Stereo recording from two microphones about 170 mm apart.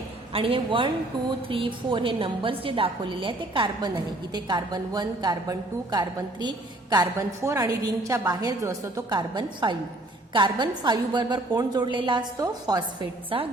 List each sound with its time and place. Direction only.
0.3 s a woman's voice: 30° right (ahead or behind)